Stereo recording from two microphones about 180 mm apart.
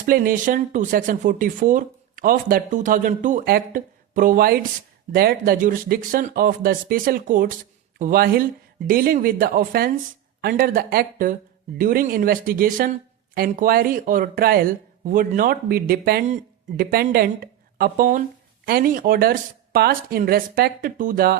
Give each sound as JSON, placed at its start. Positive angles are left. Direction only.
{"t": 0.0, "sound": "speech", "side_deg": -50}
{"t": 16.2, "sound": "speech", "side_deg": -40}
{"t": 16.8, "sound": "speech", "side_deg": -60}